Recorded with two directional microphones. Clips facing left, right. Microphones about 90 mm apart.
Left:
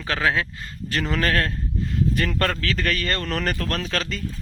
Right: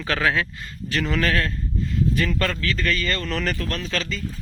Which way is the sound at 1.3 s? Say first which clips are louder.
Left 1 dB; 55° left (ahead or behind).